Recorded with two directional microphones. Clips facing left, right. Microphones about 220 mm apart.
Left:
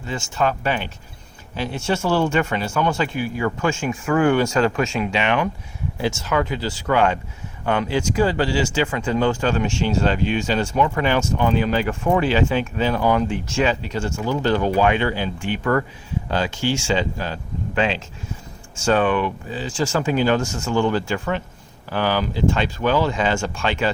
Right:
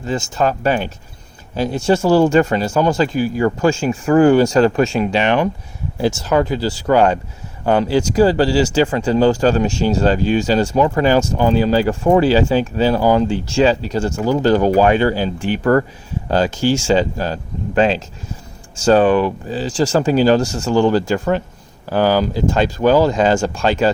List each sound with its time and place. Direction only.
0.0 s speech: 40° right (ahead or behind)